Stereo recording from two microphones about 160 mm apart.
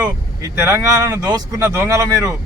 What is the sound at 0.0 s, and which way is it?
Speech, 15° right (ahead or behind).